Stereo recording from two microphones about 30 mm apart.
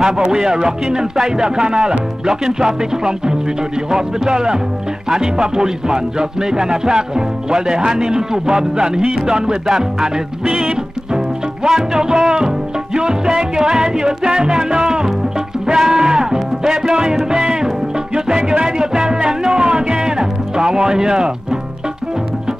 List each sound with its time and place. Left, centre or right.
0.2 s music: right
10.4 s music: right